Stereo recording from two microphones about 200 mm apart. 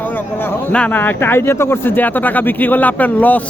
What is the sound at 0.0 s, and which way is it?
A man's voice, 10° left (ahead or behind).